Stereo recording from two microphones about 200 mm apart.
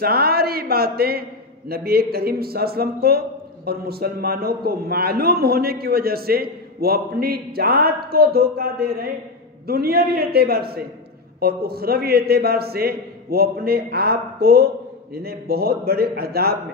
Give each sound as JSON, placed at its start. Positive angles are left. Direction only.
{"t": 0.0, "sound": "a man's voice", "side_deg": -50}